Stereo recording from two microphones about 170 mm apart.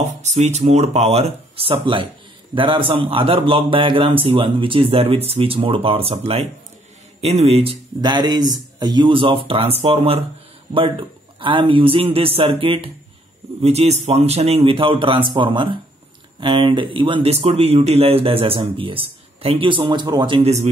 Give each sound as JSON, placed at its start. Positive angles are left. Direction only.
{"t": 0.0, "sound": "speech", "side_deg": -40}
{"t": 8.0, "sound": "speech", "side_deg": -25}